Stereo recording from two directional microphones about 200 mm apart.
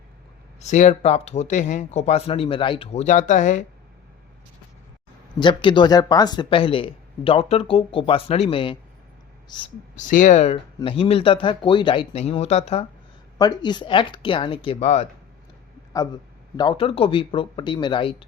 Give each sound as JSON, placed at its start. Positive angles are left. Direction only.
{"t": 0.6, "sound": "speech", "side_deg": 35}
{"t": 5.4, "sound": "speech", "side_deg": 25}
{"t": 9.9, "sound": "speech", "side_deg": 40}
{"t": 13.4, "sound": "speech", "side_deg": 20}
{"t": 16.6, "sound": "speech", "side_deg": 25}